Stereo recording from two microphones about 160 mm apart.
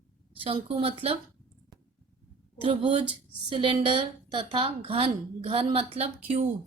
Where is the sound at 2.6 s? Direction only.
30° right (ahead or behind).